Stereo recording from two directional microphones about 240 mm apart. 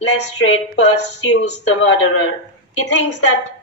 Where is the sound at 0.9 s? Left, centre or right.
Left.